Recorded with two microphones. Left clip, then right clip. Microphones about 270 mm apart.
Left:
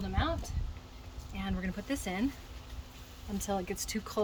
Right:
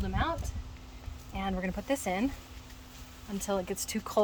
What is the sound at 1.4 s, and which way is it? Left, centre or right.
Speech, centre.